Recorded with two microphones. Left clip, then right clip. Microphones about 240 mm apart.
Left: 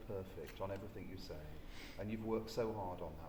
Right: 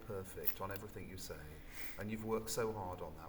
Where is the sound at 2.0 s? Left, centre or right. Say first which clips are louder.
Right 1 dB; right.